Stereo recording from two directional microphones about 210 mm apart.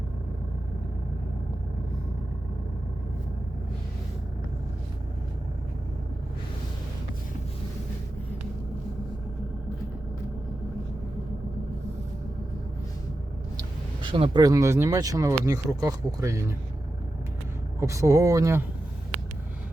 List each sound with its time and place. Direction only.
13.6 s speech: 20° right (ahead or behind)
17.7 s speech: 15° right (ahead or behind)